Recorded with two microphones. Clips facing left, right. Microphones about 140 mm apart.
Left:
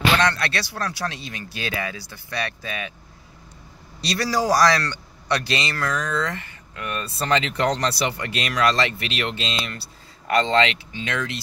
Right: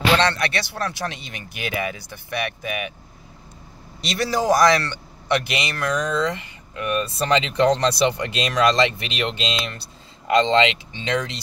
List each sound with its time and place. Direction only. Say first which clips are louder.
0.2 s speech: right 1 dB; 25° right (ahead or behind)
4.0 s speech: even; 20° right (ahead or behind)